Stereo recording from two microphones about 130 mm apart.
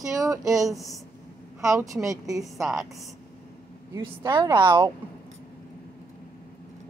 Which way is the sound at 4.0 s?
40° right (ahead or behind).